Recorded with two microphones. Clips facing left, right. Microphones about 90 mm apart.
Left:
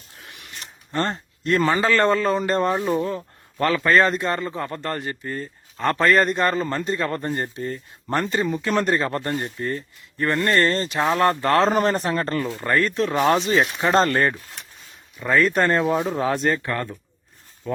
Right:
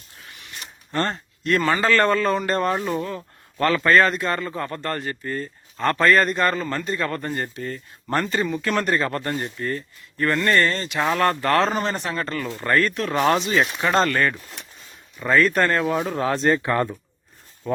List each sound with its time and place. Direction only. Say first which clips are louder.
0.9 s a man's voice: even; 15° left (ahead or behind)
2.7 s speech: left 3 dB; centre (ahead or behind)
3.6 s a man's voice: right 1 dB; 15° left (ahead or behind)
8.1 s speech: even; 15° left (ahead or behind)
10.4 s speech: left 2 dB; 30° left (ahead or behind)
11.1 s speech: left 1 dB; 20° left (ahead or behind)
11.7 s speech: left 5 dB; 45° left (ahead or behind)
12.5 s speech: even; centre (ahead or behind)
12.7 s speech: even; 20° left (ahead or behind)
13.1 s speech: even; centre (ahead or behind)
13.8 s speech: left 2 dB; 30° left (ahead or behind)
15.4 s a man's voice: even; 15° left (ahead or behind)
16.5 s speech: right 4 dB; 15° right (ahead or behind)